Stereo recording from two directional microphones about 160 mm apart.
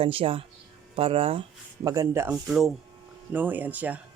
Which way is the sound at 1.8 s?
20° right (ahead or behind).